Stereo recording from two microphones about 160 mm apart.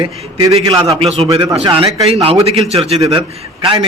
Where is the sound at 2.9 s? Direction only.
25° right (ahead or behind).